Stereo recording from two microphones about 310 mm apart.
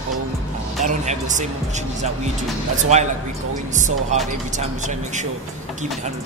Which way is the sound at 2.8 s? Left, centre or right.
Right.